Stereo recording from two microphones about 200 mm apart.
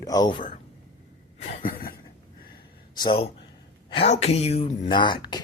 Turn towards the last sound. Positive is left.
turn(degrees=20)  # may be behind; listen again after turning